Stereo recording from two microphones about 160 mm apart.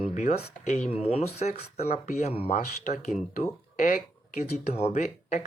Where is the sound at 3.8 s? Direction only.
55° left (ahead or behind).